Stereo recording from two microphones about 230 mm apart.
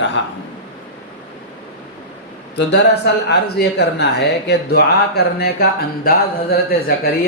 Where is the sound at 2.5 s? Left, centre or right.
Left.